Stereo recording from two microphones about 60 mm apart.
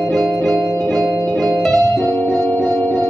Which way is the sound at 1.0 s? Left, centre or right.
Right.